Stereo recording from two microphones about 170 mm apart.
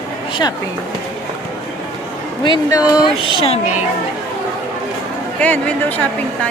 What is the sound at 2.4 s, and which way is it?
Speech, 25° left (ahead or behind).